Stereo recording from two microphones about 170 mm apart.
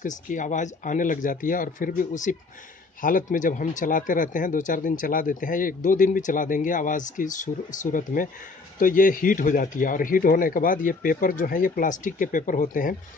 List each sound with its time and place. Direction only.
0.0 s speech: 50° left (ahead or behind)